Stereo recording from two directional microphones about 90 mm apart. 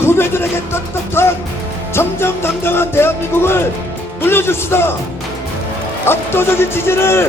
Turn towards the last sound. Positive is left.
turn(degrees=25)  # may be behind; listen again after turning